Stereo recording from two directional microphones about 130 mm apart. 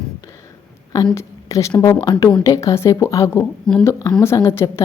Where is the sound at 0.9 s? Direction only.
25° left (ahead or behind).